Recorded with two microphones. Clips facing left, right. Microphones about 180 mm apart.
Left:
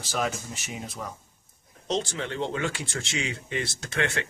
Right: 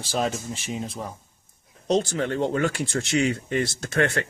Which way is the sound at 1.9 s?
45° right (ahead or behind).